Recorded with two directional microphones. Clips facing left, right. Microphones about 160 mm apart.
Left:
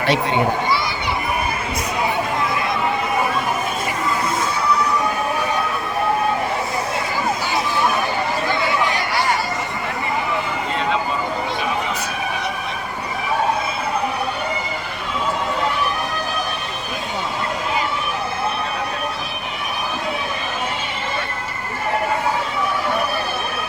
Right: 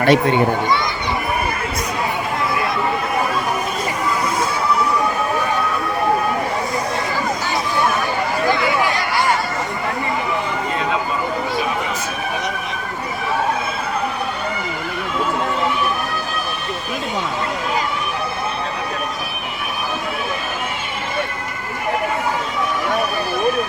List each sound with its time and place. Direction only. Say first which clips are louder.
0.0 s a child's voice: right 5 dB; 50° right (ahead or behind)